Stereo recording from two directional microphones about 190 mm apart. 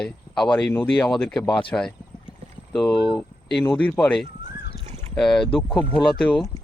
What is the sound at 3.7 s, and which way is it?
Speech, 5° left (ahead or behind).